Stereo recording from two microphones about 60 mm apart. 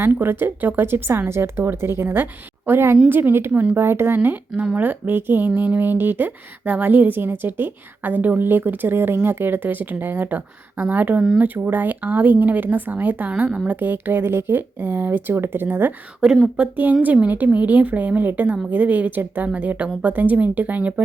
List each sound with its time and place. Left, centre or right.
0.0 s a woman's voice: right
5.5 s a woman's voice: right
13.3 s a woman's voice: centre
13.7 s a woman's voice: right
16.2 s a woman's voice: centre
16.6 s a woman's voice: right